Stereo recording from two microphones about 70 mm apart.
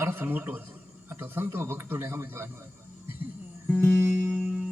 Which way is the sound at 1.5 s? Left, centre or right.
Right.